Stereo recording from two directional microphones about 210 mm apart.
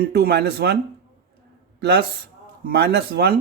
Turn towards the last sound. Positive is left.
turn(degrees=-50)  # may be behind; listen again after turning